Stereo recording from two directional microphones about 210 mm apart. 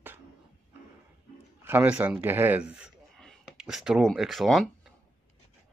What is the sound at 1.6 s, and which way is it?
A man's voice, 10° right (ahead or behind).